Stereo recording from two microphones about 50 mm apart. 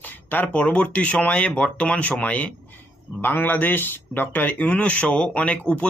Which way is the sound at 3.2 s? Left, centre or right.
Left.